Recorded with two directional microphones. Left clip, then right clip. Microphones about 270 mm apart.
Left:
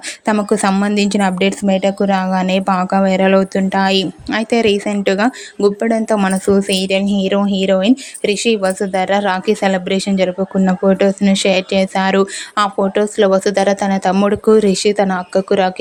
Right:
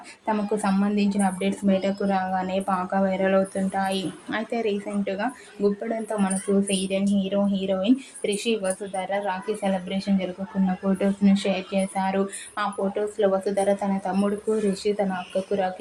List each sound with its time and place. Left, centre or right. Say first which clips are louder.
0.3 s speech: left 10 dB; left